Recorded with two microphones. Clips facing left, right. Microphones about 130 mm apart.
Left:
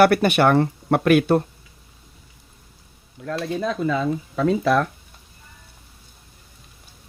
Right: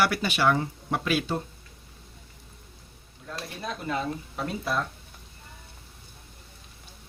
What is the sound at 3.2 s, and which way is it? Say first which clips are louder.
Speech: left 11 dB; 90° left.